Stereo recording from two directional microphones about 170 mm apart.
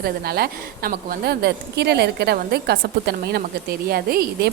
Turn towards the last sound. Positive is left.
turn(degrees=-65)  # may be behind; listen again after turning